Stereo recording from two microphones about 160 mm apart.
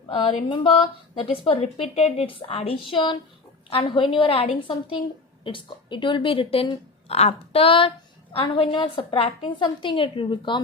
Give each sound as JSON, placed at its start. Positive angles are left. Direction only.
{"t": 0.1, "sound": "a woman's voice", "side_deg": 30}